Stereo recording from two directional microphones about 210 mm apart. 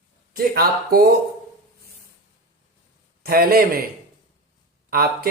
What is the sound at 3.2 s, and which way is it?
Speech, 45° right (ahead or behind).